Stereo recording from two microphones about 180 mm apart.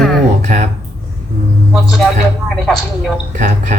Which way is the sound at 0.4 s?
40° right (ahead or behind).